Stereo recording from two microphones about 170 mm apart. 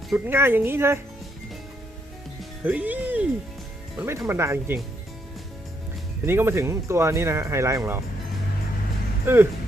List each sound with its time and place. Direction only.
0.3 s speech: 15° right (ahead or behind)
2.6 s speech: 10° right (ahead or behind)
6.2 s speech: 15° right (ahead or behind)
9.2 s speech: 15° right (ahead or behind)